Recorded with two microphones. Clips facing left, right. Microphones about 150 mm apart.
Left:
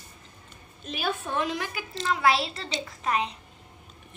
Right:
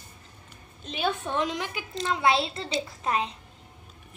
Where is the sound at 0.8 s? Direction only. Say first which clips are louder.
Right 2 dB; 20° right (ahead or behind).